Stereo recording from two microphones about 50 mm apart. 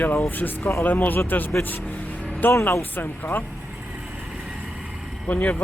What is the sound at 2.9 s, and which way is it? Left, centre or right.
Speech, left.